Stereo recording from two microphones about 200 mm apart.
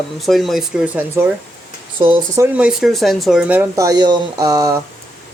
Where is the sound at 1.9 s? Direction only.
25° right (ahead or behind).